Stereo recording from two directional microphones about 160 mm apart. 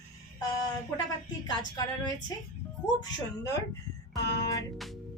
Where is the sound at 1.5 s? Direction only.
25° left (ahead or behind).